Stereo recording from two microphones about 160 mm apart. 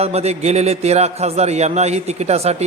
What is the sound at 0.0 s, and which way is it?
A man's voice, 40° right (ahead or behind).